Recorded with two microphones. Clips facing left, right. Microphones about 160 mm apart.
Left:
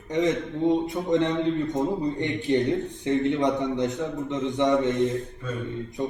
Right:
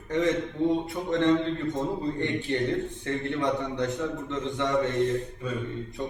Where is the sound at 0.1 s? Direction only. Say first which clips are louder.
Left 1 dB; 20° left (ahead or behind).